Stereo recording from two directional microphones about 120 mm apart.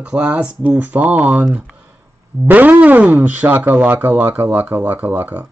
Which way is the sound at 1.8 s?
15° right (ahead or behind).